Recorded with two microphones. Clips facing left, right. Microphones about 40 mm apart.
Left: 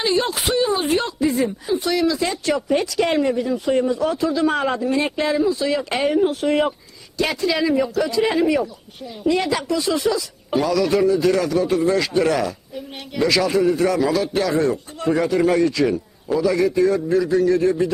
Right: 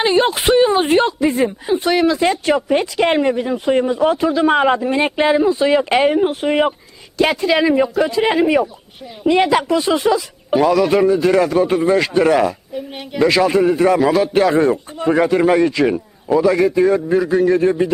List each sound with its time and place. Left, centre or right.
0.0 s a man's voice: right